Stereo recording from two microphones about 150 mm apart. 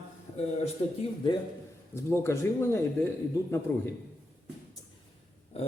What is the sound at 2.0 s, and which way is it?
Speech, 15° left (ahead or behind).